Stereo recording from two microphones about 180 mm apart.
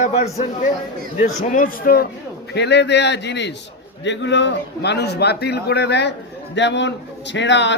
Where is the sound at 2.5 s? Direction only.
70° left (ahead or behind).